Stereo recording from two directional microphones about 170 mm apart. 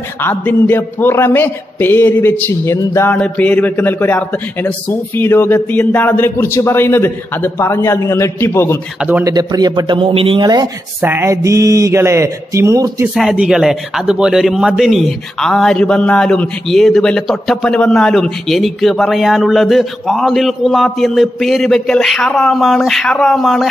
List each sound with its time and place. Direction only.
0.2 s a man's voice: 10° left (ahead or behind)
9.2 s a man's voice: 20° right (ahead or behind)
11.0 s speech: 15° right (ahead or behind)
13.1 s a man's voice: 5° right (ahead or behind)